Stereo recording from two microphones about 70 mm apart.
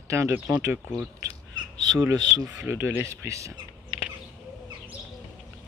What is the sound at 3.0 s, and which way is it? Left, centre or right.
Speech, right.